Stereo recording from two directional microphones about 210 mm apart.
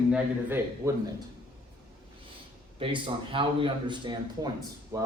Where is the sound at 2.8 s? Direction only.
25° right (ahead or behind).